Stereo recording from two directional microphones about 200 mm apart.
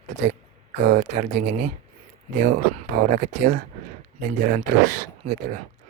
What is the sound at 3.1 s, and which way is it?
Speech, 45° right (ahead or behind).